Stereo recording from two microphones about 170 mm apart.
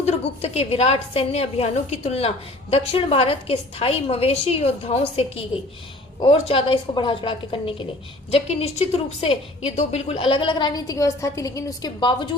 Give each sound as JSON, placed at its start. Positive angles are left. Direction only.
{"t": 0.0, "sound": "a woman's voice", "side_deg": 40}